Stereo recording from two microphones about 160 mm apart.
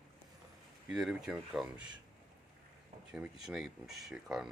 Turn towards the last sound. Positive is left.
turn(degrees=0)  # may be behind; listen again after turning